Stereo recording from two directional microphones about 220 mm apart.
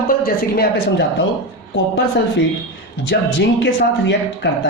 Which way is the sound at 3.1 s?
50° left (ahead or behind).